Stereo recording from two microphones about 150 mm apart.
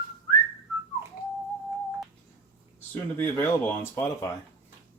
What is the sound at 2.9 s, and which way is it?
Speech, 15° left (ahead or behind).